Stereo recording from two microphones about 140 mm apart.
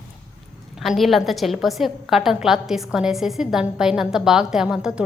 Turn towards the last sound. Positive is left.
turn(degrees=-5)  # may be behind; listen again after turning